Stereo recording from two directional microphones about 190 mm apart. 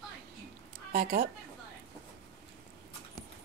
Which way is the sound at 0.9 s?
50° right (ahead or behind).